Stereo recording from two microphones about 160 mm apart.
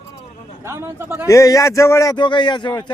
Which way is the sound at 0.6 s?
15° right (ahead or behind).